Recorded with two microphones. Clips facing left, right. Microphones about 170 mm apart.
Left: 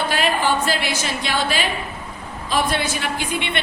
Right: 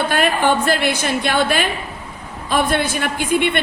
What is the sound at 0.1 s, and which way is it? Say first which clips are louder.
A woman's voice: right 3 dB; 55° right (ahead or behind).